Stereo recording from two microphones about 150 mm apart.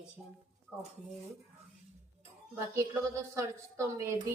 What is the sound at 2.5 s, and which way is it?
A woman's voice, 20° right (ahead or behind).